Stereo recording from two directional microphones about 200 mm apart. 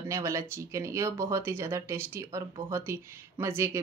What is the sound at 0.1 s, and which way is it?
Speech, 15° right (ahead or behind).